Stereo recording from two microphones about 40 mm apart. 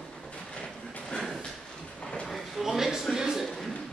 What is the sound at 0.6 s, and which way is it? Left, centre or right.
Train, centre.